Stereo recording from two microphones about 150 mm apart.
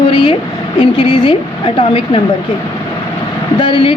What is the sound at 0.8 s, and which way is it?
A woman's voice, 30° left (ahead or behind).